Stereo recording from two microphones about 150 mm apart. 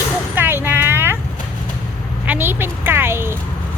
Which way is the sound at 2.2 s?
10° right (ahead or behind).